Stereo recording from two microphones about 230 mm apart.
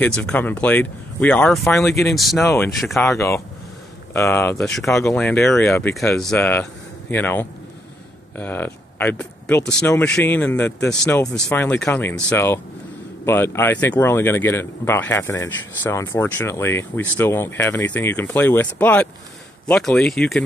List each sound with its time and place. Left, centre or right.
0.0 s speech: centre
2.4 s speech: centre
2.8 s speech: centre
3.1 s speech: centre